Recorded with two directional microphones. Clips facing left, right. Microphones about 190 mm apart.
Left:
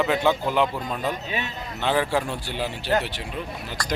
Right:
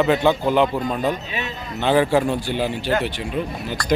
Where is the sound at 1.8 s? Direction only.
5° right (ahead or behind).